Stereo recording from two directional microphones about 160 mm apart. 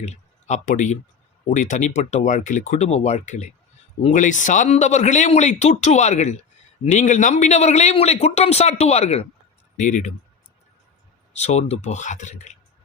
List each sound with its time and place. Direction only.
0.0 s speech: 45° left (ahead or behind)
9.8 s speech: 50° left (ahead or behind)
11.3 s speech: 45° left (ahead or behind)